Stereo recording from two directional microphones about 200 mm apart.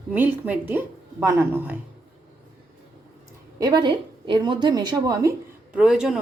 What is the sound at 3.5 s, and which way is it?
A woman's voice, 20° right (ahead or behind).